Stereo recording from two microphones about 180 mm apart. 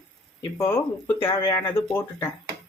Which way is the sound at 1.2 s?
30° left (ahead or behind).